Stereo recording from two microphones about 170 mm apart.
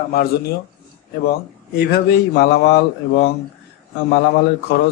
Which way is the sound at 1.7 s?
75° left (ahead or behind).